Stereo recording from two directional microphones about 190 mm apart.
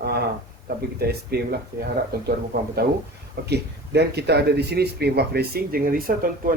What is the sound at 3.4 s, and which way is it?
Speech, 60° right (ahead or behind).